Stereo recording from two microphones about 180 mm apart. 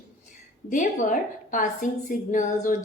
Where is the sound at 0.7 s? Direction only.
45° left (ahead or behind).